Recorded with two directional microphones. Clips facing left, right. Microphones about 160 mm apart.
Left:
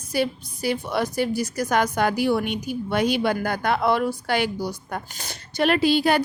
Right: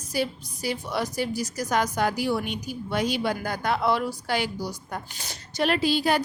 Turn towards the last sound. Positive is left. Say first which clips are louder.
# left 4 dB
turn(degrees=65)  # may be behind; listen again after turning